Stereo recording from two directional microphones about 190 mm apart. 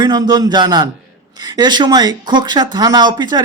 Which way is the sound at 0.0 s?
20° right (ahead or behind).